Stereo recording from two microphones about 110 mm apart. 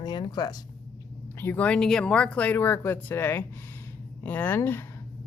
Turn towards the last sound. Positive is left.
turn(degrees=20)  # may be behind; listen again after turning